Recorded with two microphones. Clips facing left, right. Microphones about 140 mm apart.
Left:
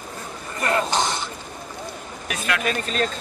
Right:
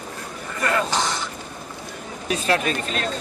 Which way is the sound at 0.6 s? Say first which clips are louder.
Left 1 dB; 25° left (ahead or behind).